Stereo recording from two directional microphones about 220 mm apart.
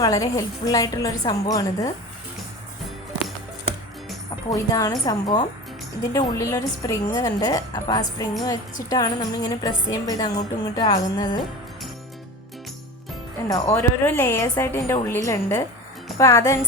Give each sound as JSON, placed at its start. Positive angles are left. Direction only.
{"t": 0.0, "sound": "a woman's voice", "side_deg": 15}
{"t": 4.4, "sound": "a woman's voice", "side_deg": 15}
{"t": 13.7, "sound": "a woman's voice", "side_deg": 10}